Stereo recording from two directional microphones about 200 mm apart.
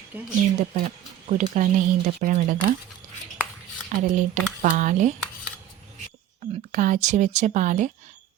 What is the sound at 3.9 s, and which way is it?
Speech, 35° right (ahead or behind).